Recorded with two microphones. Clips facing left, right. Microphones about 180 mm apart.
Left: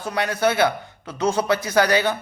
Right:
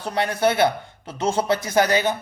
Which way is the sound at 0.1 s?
25° right (ahead or behind).